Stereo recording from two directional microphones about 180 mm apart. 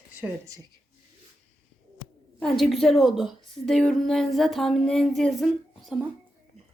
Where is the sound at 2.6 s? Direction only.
Centre (ahead or behind).